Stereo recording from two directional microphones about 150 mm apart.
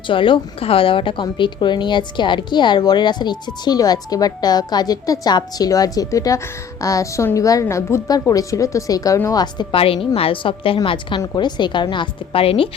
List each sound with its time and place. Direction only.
0.1 s a woman's voice: 35° left (ahead or behind)